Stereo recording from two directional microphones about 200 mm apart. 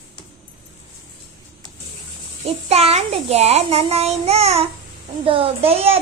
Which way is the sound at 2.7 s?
30° right (ahead or behind).